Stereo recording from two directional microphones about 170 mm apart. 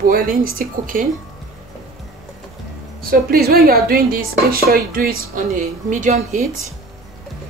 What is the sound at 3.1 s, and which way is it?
Speech, 60° right (ahead or behind).